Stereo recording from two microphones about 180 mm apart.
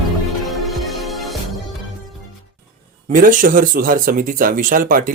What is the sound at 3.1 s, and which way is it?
Speech, 50° right (ahead or behind).